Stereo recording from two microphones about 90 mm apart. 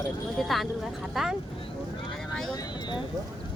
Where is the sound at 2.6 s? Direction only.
50° left (ahead or behind).